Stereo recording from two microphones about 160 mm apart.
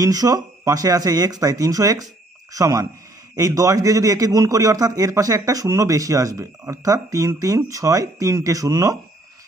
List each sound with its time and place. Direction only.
0.0 s a man's voice: 25° right (ahead or behind)